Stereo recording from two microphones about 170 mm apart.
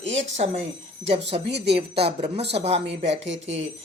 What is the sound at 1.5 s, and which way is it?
Speech, 80° right.